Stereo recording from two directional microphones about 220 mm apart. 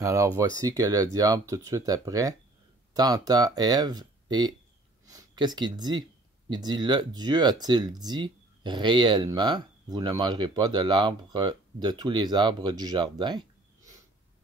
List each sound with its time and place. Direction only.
0.0 s speech: 15° right (ahead or behind)